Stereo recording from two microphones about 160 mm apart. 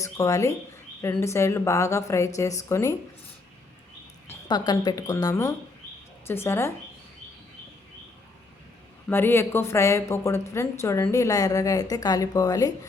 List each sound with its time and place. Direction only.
0.0 s a woman's voice: 20° left (ahead or behind)
4.4 s a woman's voice: 25° left (ahead or behind)
9.0 s speech: 15° left (ahead or behind)